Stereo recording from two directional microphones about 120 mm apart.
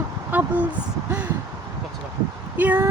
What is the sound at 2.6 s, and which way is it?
Speech, 15° right (ahead or behind).